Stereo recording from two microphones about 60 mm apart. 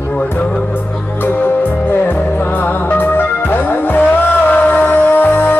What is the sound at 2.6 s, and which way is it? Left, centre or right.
Music, left.